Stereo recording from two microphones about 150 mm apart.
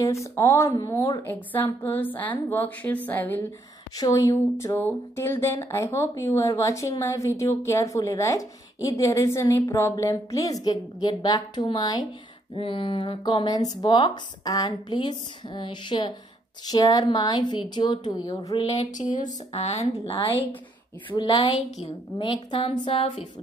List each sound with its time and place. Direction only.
0.0 s a woman's voice: 20° left (ahead or behind)
3.9 s speech: 25° left (ahead or behind)
18.6 s speech: 45° left (ahead or behind)
21.1 s speech: 30° left (ahead or behind)